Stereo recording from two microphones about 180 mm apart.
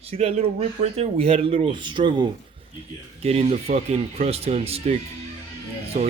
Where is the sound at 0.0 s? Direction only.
35° right (ahead or behind).